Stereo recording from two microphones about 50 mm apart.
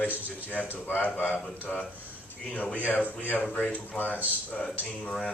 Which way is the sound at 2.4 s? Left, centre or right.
Left.